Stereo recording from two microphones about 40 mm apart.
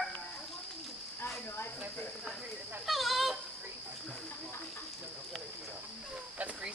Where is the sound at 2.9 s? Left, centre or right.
Centre.